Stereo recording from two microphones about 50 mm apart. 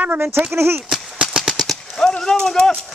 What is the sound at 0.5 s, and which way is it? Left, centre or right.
Speech, right.